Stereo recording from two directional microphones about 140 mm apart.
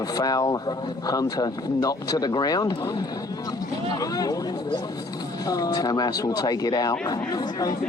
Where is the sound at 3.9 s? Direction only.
25° left (ahead or behind).